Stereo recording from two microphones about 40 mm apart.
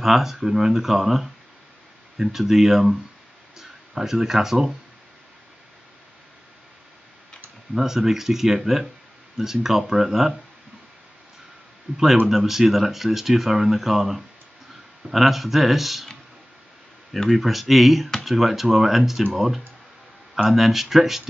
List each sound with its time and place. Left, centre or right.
0.0 s speech: centre
7.7 s speech: centre
12.3 s speech: centre
17.3 s speech: centre